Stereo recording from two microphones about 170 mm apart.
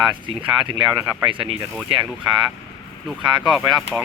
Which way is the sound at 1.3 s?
30° right (ahead or behind).